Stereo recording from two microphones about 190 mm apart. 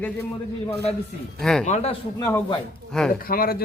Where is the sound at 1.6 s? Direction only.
35° left (ahead or behind).